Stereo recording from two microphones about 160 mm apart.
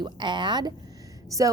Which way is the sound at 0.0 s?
30° right (ahead or behind).